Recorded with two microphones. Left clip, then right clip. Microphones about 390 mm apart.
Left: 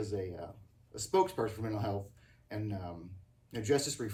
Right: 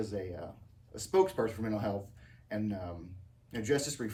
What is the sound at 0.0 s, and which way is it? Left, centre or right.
Speech, centre.